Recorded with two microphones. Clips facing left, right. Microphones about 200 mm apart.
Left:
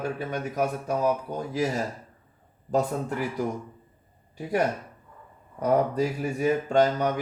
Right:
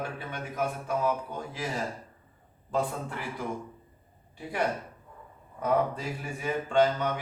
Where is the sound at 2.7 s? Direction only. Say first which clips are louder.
Left 5 dB; 40° left (ahead or behind).